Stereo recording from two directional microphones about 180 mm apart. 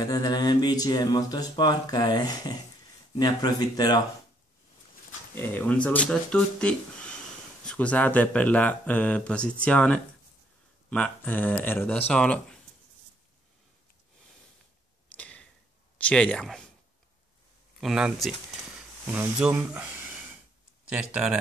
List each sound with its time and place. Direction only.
0.0 s speech: 20° left (ahead or behind)
5.3 s speech: 10° left (ahead or behind)
15.1 s arrow: 5° left (ahead or behind)
16.0 s speech: 5° left (ahead or behind)
17.7 s speech: 5° right (ahead or behind)
20.9 s speech: 5° right (ahead or behind)